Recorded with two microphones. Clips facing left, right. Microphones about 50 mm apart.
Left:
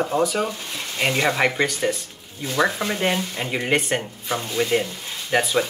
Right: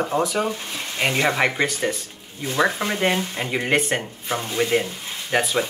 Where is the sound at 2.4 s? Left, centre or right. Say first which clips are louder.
Even; right.